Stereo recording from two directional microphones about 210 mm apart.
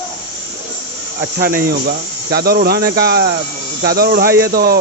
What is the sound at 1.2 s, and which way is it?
Speech, 40° right (ahead or behind).